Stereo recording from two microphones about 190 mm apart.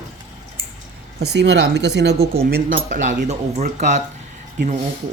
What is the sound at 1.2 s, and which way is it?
Speech, 65° right (ahead or behind).